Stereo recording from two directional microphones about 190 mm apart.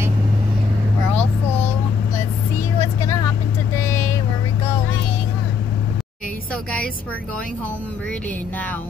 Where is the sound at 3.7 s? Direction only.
15° left (ahead or behind).